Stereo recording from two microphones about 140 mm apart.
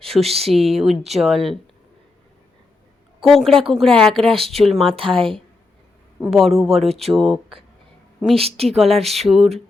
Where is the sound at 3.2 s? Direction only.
Centre (ahead or behind).